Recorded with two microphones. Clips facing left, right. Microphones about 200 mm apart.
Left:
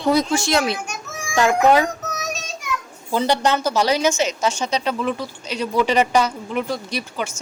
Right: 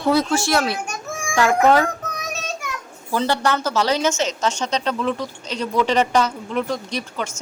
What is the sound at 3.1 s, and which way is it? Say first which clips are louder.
A woman's voice: left 1 dB; 20° left (ahead or behind).